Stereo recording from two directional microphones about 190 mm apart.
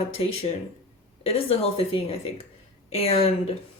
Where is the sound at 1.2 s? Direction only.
30° left (ahead or behind).